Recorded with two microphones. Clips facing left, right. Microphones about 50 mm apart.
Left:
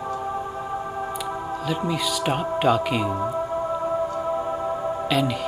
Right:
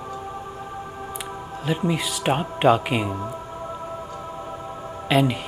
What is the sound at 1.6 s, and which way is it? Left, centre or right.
Speech, centre.